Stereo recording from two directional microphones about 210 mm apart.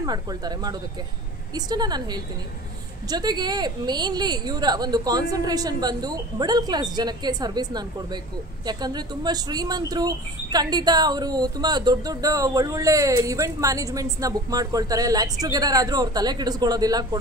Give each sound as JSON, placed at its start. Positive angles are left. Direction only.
{"t": 0.0, "sound": "a woman's voice", "side_deg": -20}